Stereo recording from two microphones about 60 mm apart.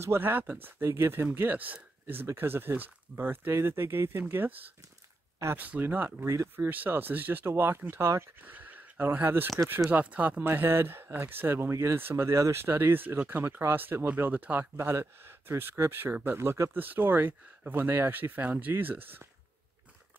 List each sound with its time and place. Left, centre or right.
0.0 s speech: right
6.2 s speech: right
6.5 s speech: right
8.4 s a sound: right
9.0 s speech: right
10.4 s speech: right
12.4 s speech: right
12.7 s speech: right
16.3 s speech: right
16.7 s speech: right